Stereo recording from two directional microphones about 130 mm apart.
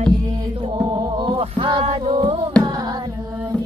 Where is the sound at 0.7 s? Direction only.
30° right (ahead or behind).